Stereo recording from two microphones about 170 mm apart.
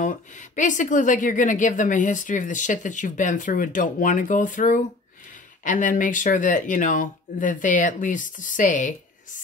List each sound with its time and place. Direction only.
0.0 s speech: 45° left (ahead or behind)